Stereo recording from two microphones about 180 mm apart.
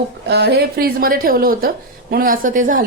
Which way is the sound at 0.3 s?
70° right (ahead or behind).